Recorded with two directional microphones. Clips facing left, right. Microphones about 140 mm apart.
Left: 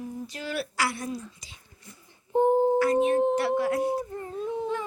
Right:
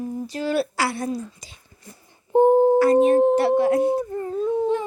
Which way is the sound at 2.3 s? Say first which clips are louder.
Right 6 dB; 60° right (ahead or behind).